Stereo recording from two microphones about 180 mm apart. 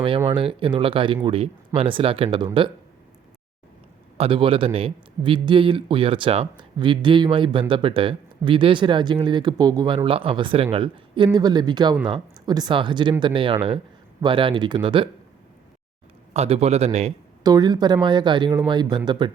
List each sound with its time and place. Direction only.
0.3 s a man's voice: 30° right (ahead or behind)
4.2 s a man's voice: 30° right (ahead or behind)
16.3 s a man's voice: 35° right (ahead or behind)
17.4 s a man's voice: 20° right (ahead or behind)